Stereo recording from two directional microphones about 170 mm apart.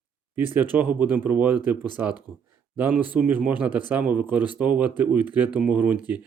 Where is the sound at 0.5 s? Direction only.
10° right (ahead or behind).